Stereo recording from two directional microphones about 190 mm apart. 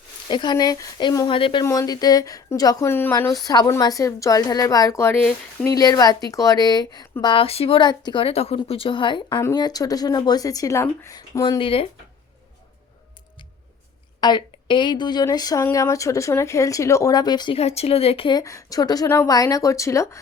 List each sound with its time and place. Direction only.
0.3 s speech: 25° left (ahead or behind)
1.6 s a woman's voice: 15° left (ahead or behind)
14.2 s speech: 25° left (ahead or behind)